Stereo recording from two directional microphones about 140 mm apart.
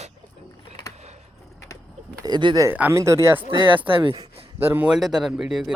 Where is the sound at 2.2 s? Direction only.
30° right (ahead or behind).